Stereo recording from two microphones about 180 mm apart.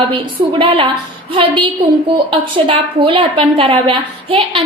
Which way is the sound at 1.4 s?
30° right (ahead or behind).